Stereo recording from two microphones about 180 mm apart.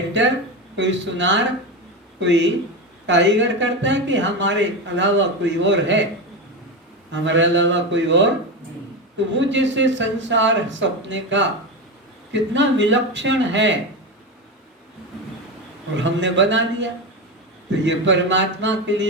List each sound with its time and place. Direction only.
0.1 s speech: 85° right
7.1 s a man's voice: 90° right
16.0 s a man's voice: 90° right